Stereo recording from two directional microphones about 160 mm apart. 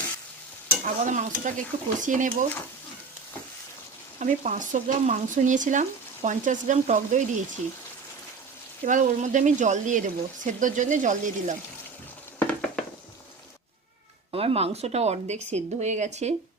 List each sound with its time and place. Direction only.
1.0 s speech: 50° right (ahead or behind)
4.2 s speech: 55° right (ahead or behind)
8.8 s speech: 50° right (ahead or behind)
12.4 s a sound: 10° left (ahead or behind)
14.3 s speech: 40° right (ahead or behind)